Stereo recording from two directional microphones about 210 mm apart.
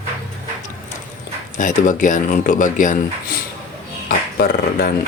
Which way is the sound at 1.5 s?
40° left (ahead or behind).